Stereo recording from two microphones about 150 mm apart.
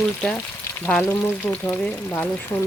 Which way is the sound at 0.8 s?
15° left (ahead or behind).